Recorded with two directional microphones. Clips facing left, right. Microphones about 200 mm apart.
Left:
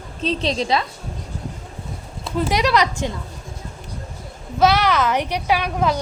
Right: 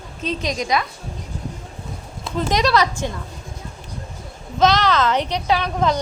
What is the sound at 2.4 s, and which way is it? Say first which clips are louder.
Speech: even; 10° left (ahead or behind).